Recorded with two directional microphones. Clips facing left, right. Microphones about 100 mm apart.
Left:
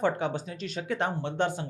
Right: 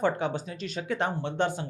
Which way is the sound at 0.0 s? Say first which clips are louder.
Right 1 dB; 20° right (ahead or behind).